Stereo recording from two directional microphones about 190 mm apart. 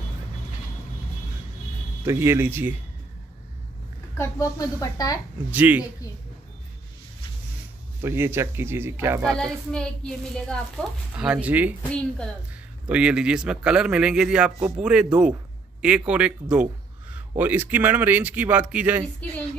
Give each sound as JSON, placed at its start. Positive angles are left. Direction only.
{"t": 2.0, "sound": "a man's voice", "side_deg": -15}
{"t": 4.2, "sound": "a woman's voice", "side_deg": 15}
{"t": 5.5, "sound": "a man's voice", "side_deg": -10}
{"t": 8.0, "sound": "a man's voice", "side_deg": -10}
{"t": 9.4, "sound": "speech", "side_deg": 5}
{"t": 11.9, "sound": "a woman's voice", "side_deg": 5}
{"t": 12.8, "sound": "a man's voice", "side_deg": -5}